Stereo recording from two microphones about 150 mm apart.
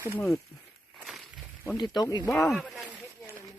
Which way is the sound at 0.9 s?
Centre (ahead or behind).